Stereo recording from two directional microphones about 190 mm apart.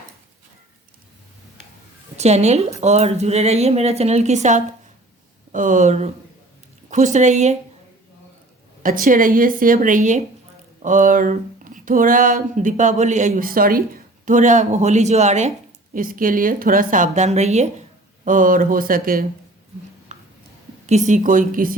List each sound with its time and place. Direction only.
2.1 s a woman's voice: 35° right (ahead or behind)
8.8 s speech: 45° right (ahead or behind)
20.1 s a sound: 35° right (ahead or behind)
20.8 s speech: 40° right (ahead or behind)